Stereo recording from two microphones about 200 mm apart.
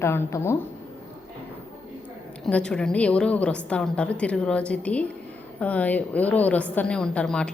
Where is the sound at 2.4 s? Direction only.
5° left (ahead or behind).